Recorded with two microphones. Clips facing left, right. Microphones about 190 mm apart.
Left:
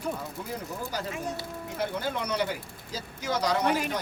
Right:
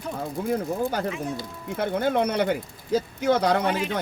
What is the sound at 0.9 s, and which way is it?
Speech, 55° right (ahead or behind).